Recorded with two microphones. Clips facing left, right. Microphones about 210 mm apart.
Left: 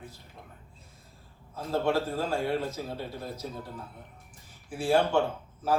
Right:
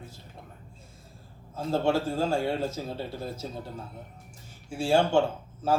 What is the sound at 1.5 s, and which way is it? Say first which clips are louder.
Speech: right 2 dB; 25° right (ahead or behind).